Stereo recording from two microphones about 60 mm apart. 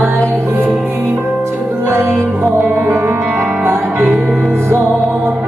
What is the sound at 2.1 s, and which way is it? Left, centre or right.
Music, right.